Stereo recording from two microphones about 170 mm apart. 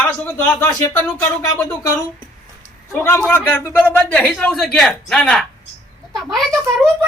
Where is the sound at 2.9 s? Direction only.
15° left (ahead or behind).